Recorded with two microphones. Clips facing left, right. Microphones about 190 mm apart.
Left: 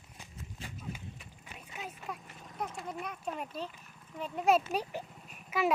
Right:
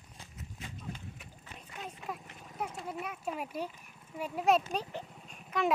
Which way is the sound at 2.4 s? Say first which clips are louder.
Even; 5° right (ahead or behind).